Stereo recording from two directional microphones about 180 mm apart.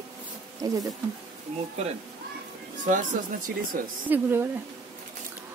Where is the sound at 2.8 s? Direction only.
45° right (ahead or behind).